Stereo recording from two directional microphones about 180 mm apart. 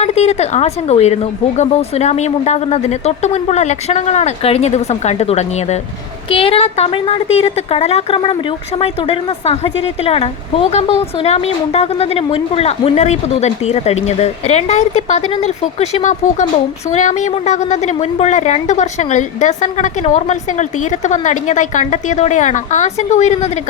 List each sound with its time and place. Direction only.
0.0 s a woman's voice: 35° left (ahead or behind)